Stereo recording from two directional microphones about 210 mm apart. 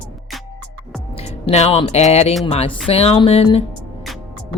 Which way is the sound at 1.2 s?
30° left (ahead or behind).